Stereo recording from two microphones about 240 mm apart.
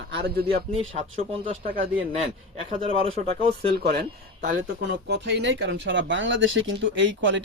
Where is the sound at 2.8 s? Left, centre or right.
Right.